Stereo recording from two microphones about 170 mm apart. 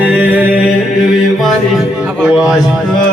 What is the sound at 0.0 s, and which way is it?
Music, 10° right (ahead or behind).